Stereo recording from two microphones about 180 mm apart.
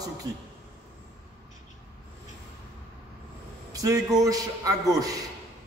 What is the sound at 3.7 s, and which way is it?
A man's voice, 20° right (ahead or behind).